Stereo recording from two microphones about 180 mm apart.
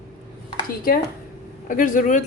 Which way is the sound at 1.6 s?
45° left (ahead or behind).